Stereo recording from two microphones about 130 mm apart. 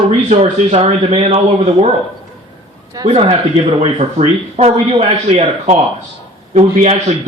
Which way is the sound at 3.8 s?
50° right (ahead or behind).